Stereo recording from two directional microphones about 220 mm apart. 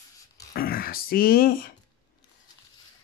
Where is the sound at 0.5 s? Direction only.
40° left (ahead or behind).